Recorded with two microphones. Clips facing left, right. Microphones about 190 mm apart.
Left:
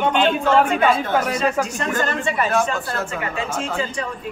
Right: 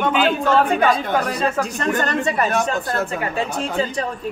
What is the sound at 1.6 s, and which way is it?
Speech, 35° right (ahead or behind).